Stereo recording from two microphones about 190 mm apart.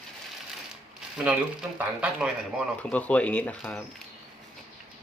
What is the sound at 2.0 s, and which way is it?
Speech, 5° right (ahead or behind).